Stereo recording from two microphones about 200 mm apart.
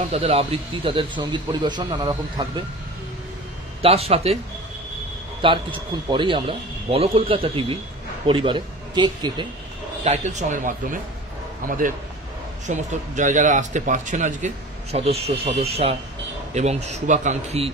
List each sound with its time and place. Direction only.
0.1 s a man's voice: 30° right (ahead or behind)
3.8 s a man's voice: 30° right (ahead or behind)
5.4 s a man's voice: 25° right (ahead or behind)
10.0 s a man's voice: 35° right (ahead or behind)